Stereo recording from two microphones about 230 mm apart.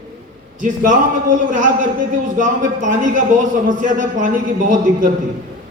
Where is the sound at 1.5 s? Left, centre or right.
Right.